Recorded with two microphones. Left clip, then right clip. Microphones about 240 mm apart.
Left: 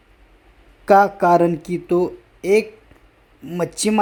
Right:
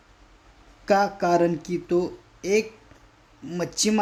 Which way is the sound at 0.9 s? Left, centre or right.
Centre.